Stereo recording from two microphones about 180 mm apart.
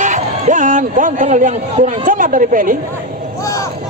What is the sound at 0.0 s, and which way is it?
Speech, 45° right (ahead or behind).